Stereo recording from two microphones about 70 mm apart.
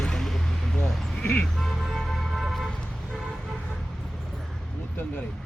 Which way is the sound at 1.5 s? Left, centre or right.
Centre.